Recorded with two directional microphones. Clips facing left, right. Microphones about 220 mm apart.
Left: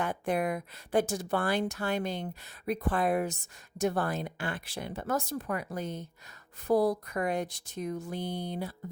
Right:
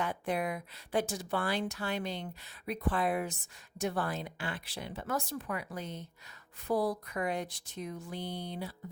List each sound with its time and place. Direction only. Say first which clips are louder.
0.0 s speech: left 4 dB; 50° left (ahead or behind)